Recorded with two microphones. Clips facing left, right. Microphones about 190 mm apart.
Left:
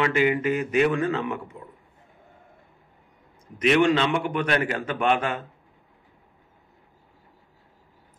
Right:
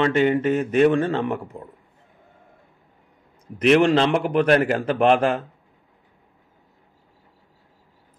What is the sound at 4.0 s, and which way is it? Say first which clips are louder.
Speech: right 5 dB; 35° right (ahead or behind).